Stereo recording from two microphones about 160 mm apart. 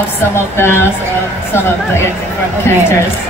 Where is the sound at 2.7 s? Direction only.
15° left (ahead or behind).